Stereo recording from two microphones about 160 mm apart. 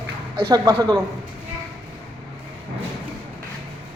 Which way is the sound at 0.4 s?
20° right (ahead or behind).